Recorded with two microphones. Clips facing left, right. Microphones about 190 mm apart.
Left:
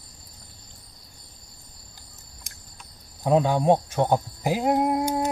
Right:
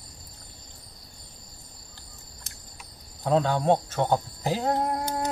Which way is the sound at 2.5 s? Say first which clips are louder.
Right 2 dB; 10° left (ahead or behind).